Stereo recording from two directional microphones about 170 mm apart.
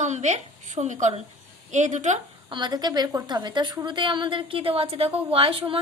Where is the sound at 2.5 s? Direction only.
25° right (ahead or behind).